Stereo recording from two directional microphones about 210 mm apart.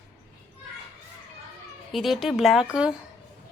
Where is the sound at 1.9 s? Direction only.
Centre (ahead or behind).